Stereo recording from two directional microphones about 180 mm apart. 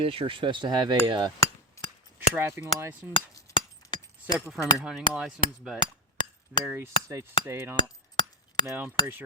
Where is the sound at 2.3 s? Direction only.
15° right (ahead or behind).